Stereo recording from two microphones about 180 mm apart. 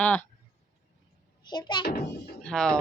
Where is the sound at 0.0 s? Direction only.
10° left (ahead or behind).